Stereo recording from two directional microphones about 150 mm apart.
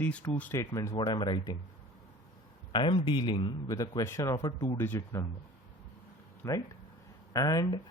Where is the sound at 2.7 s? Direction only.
30° left (ahead or behind).